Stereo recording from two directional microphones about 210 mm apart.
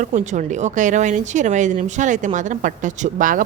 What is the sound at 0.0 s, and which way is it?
Speech, 35° right (ahead or behind).